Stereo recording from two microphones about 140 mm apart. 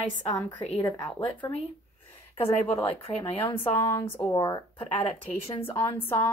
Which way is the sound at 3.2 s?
45° left (ahead or behind).